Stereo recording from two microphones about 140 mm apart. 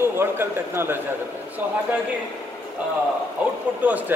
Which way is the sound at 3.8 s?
10° right (ahead or behind).